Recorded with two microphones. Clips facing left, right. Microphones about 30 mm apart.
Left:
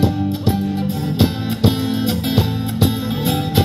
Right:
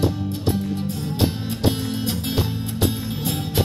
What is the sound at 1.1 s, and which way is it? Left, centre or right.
Music, left.